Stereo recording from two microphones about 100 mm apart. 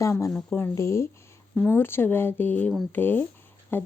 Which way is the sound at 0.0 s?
35° left (ahead or behind).